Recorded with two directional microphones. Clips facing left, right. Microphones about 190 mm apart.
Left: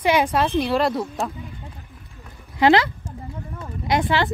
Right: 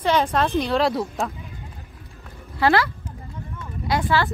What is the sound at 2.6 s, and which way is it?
Speech, 20° left (ahead or behind).